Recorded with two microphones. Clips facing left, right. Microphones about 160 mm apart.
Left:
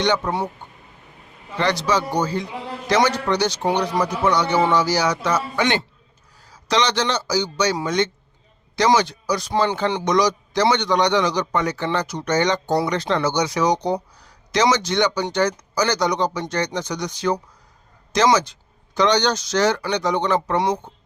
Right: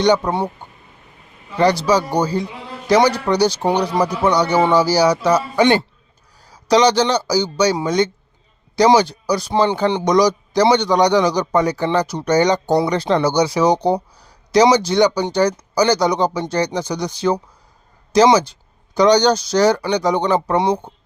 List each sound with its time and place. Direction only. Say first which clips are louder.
1.5 s a man's voice: right 6 dB; 35° right (ahead or behind)